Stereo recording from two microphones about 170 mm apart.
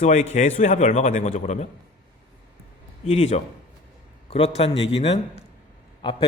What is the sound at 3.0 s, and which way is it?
A man's voice, 40° left (ahead or behind).